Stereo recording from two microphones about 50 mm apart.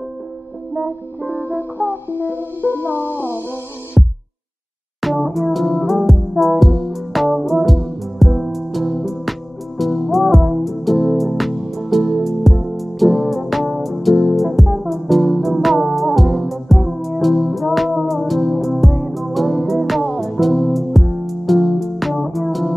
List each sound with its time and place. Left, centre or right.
1.8 s music: right
2.9 s music: left
4.0 s music: centre